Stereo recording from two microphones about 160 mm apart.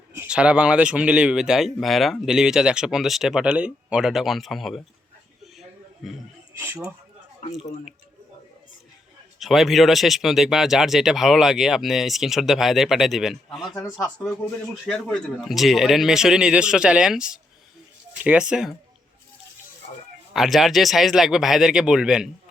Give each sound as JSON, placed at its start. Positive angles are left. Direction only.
{"t": 0.1, "sound": "speech", "side_deg": -10}
{"t": 5.5, "sound": "a sound", "side_deg": 0}
{"t": 6.5, "sound": "speech", "side_deg": -15}
{"t": 9.4, "sound": "speech", "side_deg": 0}
{"t": 20.3, "sound": "speech", "side_deg": 0}